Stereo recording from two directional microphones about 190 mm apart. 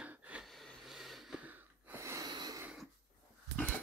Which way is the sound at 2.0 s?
15° right (ahead or behind).